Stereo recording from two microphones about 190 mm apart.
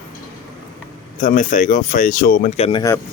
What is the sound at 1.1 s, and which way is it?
Speech, 40° left (ahead or behind).